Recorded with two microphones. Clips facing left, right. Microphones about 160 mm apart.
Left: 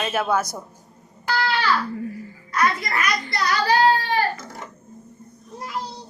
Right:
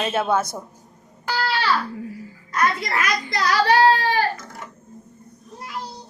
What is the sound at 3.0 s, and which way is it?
A child's voice, 80° right.